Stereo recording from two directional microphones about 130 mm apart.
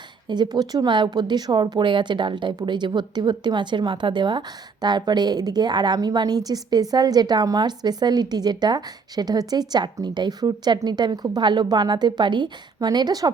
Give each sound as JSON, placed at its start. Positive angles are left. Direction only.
{"t": 0.3, "sound": "speech", "side_deg": -35}